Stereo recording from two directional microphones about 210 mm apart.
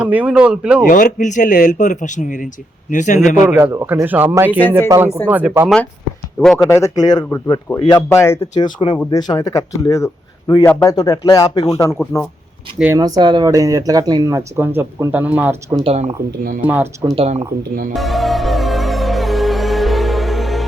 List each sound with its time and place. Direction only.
0.0 s speech: 5° right (ahead or behind)
0.9 s a man's voice: 40° left (ahead or behind)
3.2 s speech: 10° right (ahead or behind)
5.0 s speech: 10° left (ahead or behind)
5.3 s speech: 5° right (ahead or behind)
6.7 s speech: 15° left (ahead or behind)
12.8 s speech: 15° right (ahead or behind)
15.8 s speech: 30° right (ahead or behind)
16.6 s speech: 10° right (ahead or behind)
17.2 s speech: 30° right (ahead or behind)
17.9 s music: centre (ahead or behind)